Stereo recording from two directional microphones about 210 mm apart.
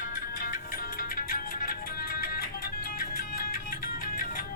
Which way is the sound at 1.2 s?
40° left (ahead or behind).